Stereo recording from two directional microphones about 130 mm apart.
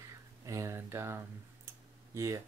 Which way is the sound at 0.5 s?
25° right (ahead or behind).